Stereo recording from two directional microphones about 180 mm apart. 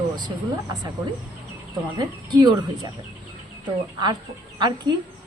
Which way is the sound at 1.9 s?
25° right (ahead or behind).